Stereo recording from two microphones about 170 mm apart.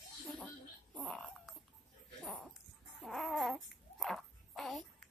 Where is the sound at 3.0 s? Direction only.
Centre (ahead or behind).